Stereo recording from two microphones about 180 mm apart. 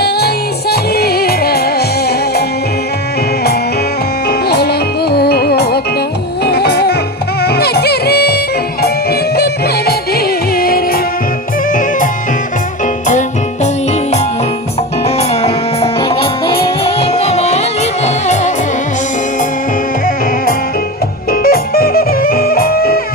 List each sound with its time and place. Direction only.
0.7 s music: 60° left (ahead or behind)
4.3 s music: 65° left (ahead or behind)
15.0 s music: 35° left (ahead or behind)
21.2 s music: 55° left (ahead or behind)